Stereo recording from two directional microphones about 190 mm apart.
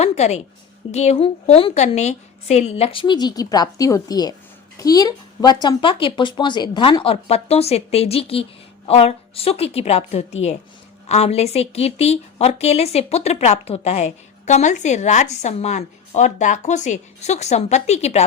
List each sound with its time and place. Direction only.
0.0 s a woman's voice: 35° left (ahead or behind)